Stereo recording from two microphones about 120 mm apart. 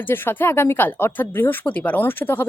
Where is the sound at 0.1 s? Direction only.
20° left (ahead or behind).